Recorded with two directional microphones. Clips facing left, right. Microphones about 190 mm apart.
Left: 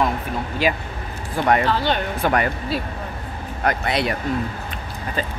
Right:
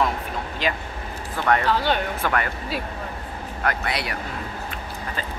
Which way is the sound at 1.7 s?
10° right (ahead or behind).